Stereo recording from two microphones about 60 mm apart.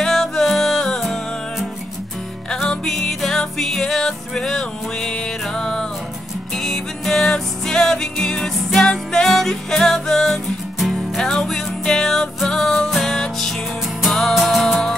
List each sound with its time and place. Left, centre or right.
0.0 s music: centre
2.5 s music: centre